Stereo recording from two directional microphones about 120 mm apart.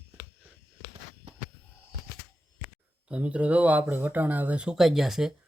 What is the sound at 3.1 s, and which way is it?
Speech, 10° right (ahead or behind).